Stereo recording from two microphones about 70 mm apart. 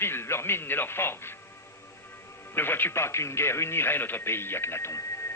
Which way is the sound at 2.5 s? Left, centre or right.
Left.